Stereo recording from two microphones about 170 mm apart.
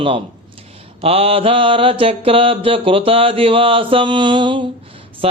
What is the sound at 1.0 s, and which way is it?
Mantra, 35° right (ahead or behind).